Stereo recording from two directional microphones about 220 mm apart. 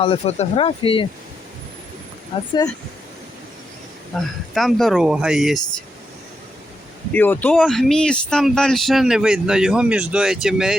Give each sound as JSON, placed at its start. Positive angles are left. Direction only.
{"t": 0.0, "sound": "speech", "side_deg": 25}
{"t": 4.2, "sound": "speech", "side_deg": 0}
{"t": 7.1, "sound": "speech", "side_deg": 10}